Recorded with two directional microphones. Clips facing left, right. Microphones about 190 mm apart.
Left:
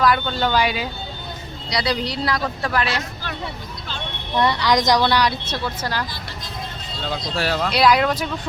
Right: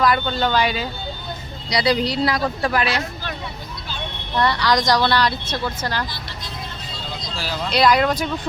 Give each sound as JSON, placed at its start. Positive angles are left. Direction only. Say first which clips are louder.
{"t": 0.0, "sound": "speech", "louder": "even", "side_deg": 0}
{"t": 1.7, "sound": "speech", "louder": "right 4 dB", "side_deg": -5}
{"t": 4.4, "sound": "speech", "louder": "left 1 dB", "side_deg": 20}
{"t": 7.1, "sound": "vehicle", "louder": "left 6 dB", "side_deg": 65}
{"t": 7.7, "sound": "speech", "louder": "right 2 dB", "side_deg": 5}